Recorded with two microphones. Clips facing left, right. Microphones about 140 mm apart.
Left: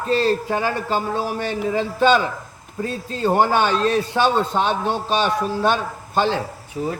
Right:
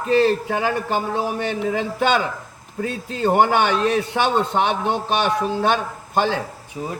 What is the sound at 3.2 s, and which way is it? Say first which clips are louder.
A man's voice: right 1 dB; 20° right (ahead or behind).